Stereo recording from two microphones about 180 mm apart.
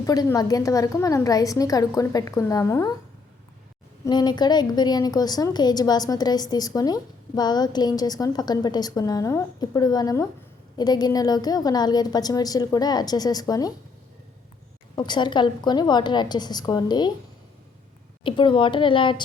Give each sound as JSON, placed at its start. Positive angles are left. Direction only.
{"t": 0.0, "sound": "a woman's voice", "side_deg": 20}
{"t": 4.0, "sound": "a woman's voice", "side_deg": 25}
{"t": 14.9, "sound": "a woman's voice", "side_deg": 25}
{"t": 18.2, "sound": "a woman's voice", "side_deg": 25}